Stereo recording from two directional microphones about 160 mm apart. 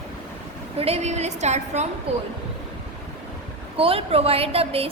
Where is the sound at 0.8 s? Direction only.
40° right (ahead or behind).